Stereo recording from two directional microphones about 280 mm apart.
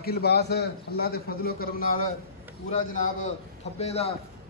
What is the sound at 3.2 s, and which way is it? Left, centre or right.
Speech, left.